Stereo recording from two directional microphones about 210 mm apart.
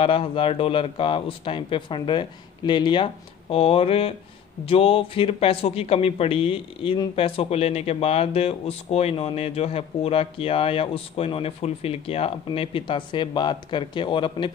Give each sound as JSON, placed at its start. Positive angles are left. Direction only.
{"t": 0.0, "sound": "a man's voice", "side_deg": 25}